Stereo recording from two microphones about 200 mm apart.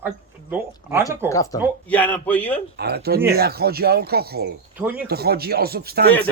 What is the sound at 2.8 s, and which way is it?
Speech, 55° right (ahead or behind).